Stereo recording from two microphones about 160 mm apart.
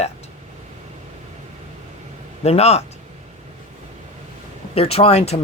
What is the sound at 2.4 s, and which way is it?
Speech, 40° left (ahead or behind).